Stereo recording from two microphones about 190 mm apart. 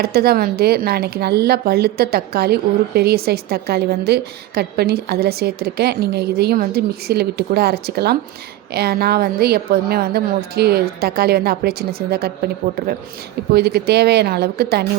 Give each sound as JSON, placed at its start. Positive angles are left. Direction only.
{"t": 0.0, "sound": "speech", "side_deg": -55}
{"t": 13.5, "sound": "speech", "side_deg": -55}